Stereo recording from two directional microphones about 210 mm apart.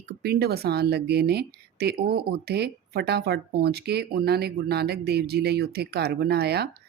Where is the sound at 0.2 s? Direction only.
50° right (ahead or behind).